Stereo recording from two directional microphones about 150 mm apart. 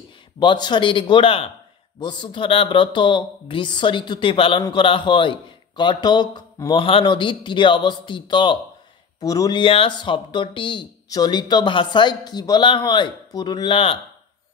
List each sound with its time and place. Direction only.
0.4 s speech: 30° left (ahead or behind)